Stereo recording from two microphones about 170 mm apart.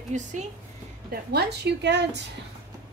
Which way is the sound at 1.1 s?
75° right (ahead or behind).